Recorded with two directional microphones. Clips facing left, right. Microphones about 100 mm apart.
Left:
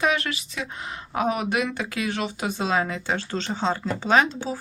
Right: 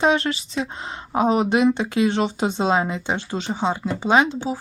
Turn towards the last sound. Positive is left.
turn(degrees=-20)  # may be behind; listen again after turning